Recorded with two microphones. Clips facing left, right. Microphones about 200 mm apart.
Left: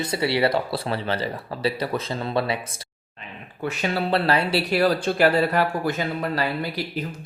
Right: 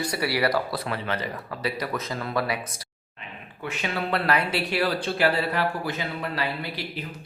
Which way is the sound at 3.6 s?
35° left (ahead or behind).